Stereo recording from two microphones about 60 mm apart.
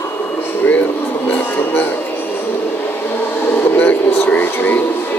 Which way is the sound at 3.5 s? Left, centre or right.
Left.